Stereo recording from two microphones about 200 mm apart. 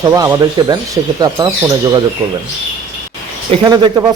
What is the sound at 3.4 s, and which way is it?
Speech, 25° right (ahead or behind).